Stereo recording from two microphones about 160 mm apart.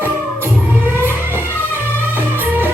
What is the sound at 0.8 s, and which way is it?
Music, 15° right (ahead or behind).